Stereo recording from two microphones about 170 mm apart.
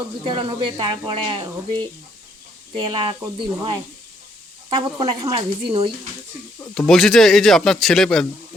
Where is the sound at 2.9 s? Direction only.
30° right (ahead or behind).